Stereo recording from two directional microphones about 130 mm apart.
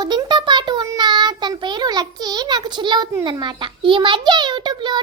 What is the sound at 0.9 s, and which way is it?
Child singing, 35° right (ahead or behind).